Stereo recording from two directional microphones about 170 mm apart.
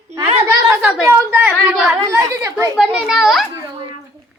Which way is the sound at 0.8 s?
5° right (ahead or behind).